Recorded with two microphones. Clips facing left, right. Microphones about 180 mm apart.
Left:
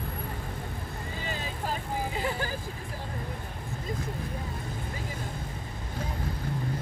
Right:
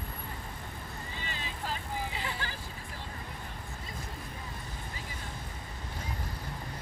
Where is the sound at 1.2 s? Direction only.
45° left (ahead or behind).